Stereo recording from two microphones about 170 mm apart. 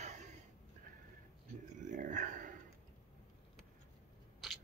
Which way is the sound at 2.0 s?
50° right (ahead or behind).